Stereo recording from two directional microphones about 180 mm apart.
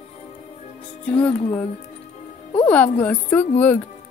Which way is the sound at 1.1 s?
5° left (ahead or behind).